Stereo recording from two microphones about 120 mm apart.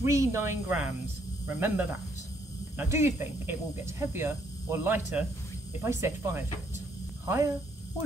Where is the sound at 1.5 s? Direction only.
20° right (ahead or behind).